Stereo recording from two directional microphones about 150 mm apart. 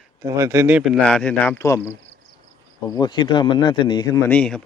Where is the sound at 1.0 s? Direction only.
5° left (ahead or behind).